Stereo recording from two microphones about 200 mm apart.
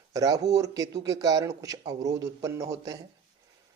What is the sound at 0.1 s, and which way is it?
Speech, 15° right (ahead or behind).